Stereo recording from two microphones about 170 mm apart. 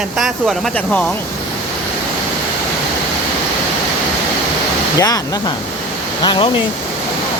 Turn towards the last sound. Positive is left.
turn(degrees=30)  # may be behind; listen again after turning